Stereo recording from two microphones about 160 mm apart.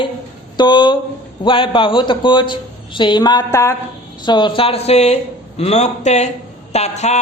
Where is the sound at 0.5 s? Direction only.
30° left (ahead or behind).